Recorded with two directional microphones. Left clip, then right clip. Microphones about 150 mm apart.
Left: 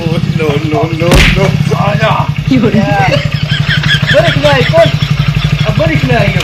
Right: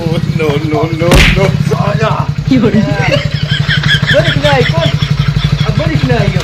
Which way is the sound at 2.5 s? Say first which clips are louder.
Left 1 dB; centre (ahead or behind).